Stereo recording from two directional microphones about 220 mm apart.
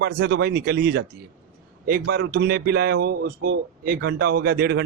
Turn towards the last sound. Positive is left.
turn(degrees=-45)  # may be behind; listen again after turning